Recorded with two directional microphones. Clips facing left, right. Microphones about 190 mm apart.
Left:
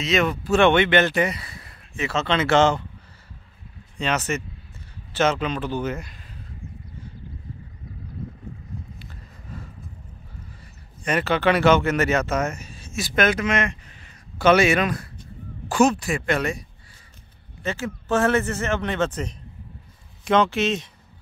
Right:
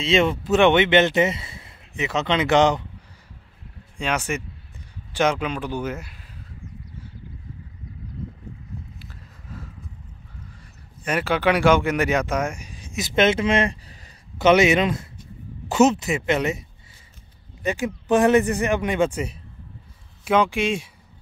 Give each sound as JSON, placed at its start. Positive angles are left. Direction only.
{"t": 0.0, "sound": "speech", "side_deg": -25}
{"t": 4.0, "sound": "speech", "side_deg": -10}
{"t": 11.1, "sound": "speech", "side_deg": -10}
{"t": 14.4, "sound": "speech", "side_deg": -20}
{"t": 17.6, "sound": "speech", "side_deg": -15}